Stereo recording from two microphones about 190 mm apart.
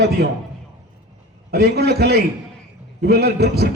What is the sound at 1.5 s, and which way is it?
A man's voice, 55° right (ahead or behind).